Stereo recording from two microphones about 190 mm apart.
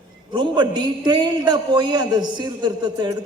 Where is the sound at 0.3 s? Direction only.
25° right (ahead or behind).